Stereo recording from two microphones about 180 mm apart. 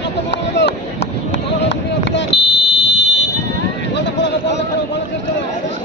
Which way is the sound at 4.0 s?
85° left.